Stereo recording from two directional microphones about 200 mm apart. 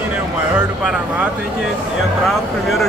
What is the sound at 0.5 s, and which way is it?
Speech, 5° right (ahead or behind).